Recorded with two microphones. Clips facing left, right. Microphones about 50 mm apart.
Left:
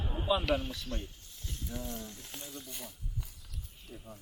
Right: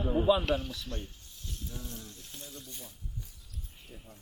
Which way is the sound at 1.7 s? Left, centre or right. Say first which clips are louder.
Left 6 dB; left.